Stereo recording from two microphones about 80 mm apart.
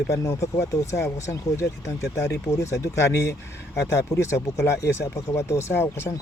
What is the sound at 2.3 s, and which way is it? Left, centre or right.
Speech, left.